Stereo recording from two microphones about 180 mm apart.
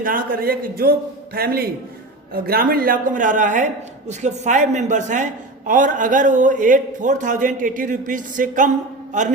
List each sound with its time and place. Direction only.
0.0 s a man's voice: 50° right (ahead or behind)